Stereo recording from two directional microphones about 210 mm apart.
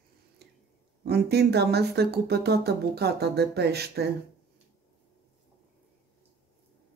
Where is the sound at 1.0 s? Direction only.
50° right (ahead or behind).